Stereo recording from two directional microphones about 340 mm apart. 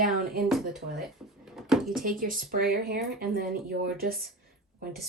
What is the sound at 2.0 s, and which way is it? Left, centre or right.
Speech, right.